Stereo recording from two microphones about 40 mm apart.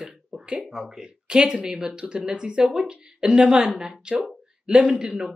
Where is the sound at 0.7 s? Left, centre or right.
Centre.